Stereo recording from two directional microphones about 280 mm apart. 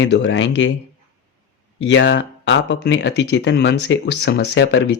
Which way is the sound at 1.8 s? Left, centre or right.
Left.